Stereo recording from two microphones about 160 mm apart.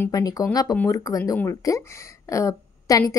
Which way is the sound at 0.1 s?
25° left (ahead or behind).